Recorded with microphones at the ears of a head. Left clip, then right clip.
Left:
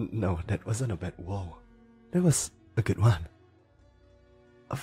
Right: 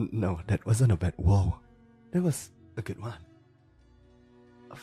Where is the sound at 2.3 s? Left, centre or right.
Left.